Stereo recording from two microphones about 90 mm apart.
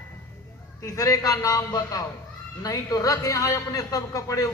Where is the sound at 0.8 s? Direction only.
40° left (ahead or behind).